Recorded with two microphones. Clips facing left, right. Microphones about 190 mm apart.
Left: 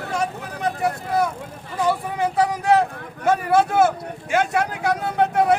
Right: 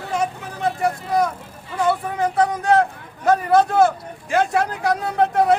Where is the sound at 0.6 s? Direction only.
Centre (ahead or behind).